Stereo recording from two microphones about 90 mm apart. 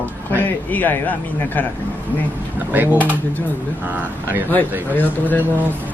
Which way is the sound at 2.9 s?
20° left (ahead or behind).